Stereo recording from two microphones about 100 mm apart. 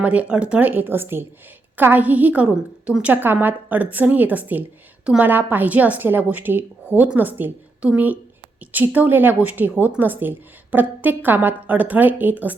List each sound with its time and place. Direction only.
0.0 s a woman's voice: 15° right (ahead or behind)